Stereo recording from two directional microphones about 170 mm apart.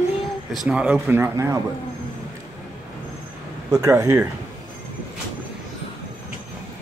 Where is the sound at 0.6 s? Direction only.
5° right (ahead or behind).